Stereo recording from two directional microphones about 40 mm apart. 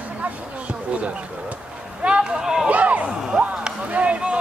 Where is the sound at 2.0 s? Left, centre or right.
Right.